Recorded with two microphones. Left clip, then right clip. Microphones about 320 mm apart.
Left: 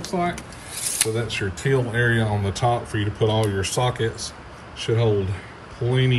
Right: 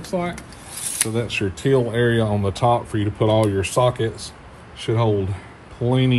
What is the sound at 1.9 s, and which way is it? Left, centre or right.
Speech, right.